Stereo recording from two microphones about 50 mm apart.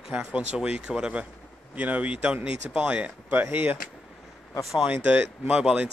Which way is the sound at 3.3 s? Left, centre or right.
Right.